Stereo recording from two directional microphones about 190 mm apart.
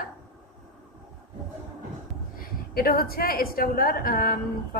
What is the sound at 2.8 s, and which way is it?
A woman's voice, 50° left (ahead or behind).